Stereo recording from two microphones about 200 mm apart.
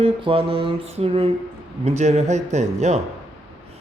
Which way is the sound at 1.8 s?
35° right (ahead or behind).